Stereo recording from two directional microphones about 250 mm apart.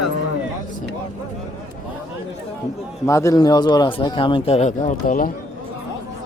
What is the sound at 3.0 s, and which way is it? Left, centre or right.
Speech, centre.